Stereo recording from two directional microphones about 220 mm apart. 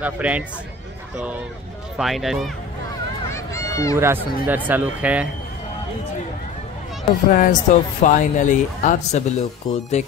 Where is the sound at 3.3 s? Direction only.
15° left (ahead or behind).